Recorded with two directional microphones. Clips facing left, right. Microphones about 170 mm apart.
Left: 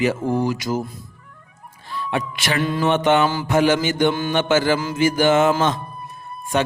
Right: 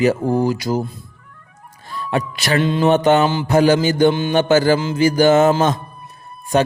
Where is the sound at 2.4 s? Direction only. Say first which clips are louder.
Right 6 dB; 40° right (ahead or behind).